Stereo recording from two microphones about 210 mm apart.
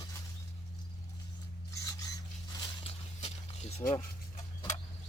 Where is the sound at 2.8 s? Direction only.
30° left (ahead or behind).